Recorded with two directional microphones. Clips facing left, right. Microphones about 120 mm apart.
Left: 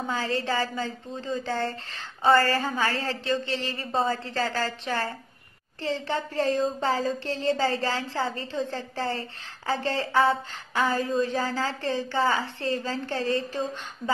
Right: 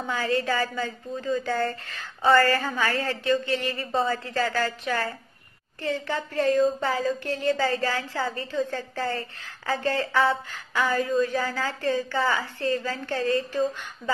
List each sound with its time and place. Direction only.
0.1 s a woman's voice: 35° left (ahead or behind)
13.5 s a woman's voice: 20° left (ahead or behind)